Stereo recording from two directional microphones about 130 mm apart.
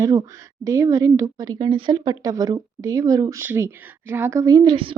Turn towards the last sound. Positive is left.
turn(degrees=-35)  # may be behind; listen again after turning